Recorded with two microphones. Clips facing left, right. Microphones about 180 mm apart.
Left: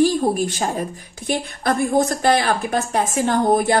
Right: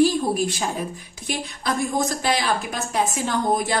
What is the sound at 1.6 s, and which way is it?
A woman's voice, 60° left (ahead or behind).